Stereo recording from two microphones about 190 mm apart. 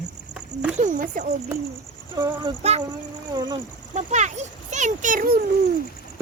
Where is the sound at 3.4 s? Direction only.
20° right (ahead or behind).